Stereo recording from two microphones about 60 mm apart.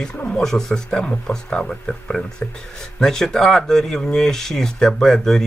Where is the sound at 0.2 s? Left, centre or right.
Centre.